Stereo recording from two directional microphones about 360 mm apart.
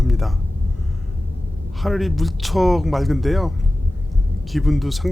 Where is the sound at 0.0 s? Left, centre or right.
Centre.